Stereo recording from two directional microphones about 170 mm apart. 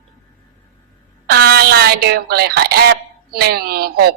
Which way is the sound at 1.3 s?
70° right (ahead or behind).